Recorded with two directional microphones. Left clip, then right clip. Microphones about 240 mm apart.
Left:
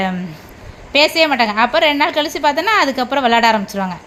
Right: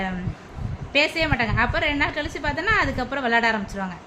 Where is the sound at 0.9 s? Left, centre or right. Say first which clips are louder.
Left 9 dB; left.